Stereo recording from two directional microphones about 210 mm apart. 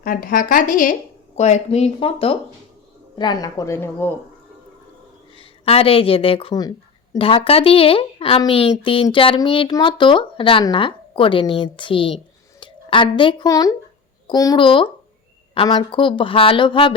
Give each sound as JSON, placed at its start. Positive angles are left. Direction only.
{"t": 0.0, "sound": "a woman's voice", "side_deg": 40}
{"t": 5.4, "sound": "speech", "side_deg": 25}